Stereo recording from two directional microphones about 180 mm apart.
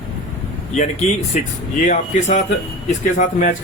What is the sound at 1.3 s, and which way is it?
Speech, 45° left (ahead or behind).